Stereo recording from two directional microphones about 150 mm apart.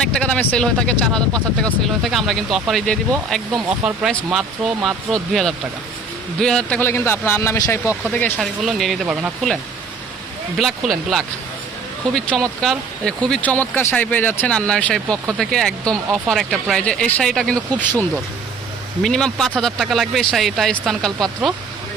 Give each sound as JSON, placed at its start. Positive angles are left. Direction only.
{"t": 0.0, "sound": "speech", "side_deg": 5}
{"t": 4.1, "sound": "speech", "side_deg": -5}
{"t": 10.6, "sound": "speech", "side_deg": 0}
{"t": 19.0, "sound": "speech", "side_deg": 5}